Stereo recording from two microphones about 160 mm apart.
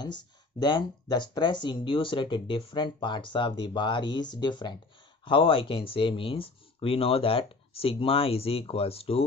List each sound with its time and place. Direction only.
0.0 s speech: 25° left (ahead or behind)